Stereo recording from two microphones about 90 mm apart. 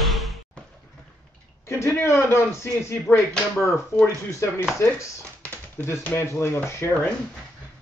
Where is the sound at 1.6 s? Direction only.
30° left (ahead or behind).